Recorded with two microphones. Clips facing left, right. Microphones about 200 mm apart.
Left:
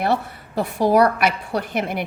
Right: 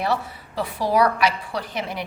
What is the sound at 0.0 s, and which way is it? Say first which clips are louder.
A woman's voice: left 3 dB; 55° left (ahead or behind).